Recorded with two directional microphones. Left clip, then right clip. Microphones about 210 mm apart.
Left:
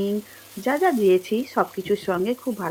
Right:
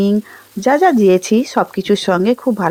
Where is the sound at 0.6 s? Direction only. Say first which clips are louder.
Right 9 dB; 45° right (ahead or behind).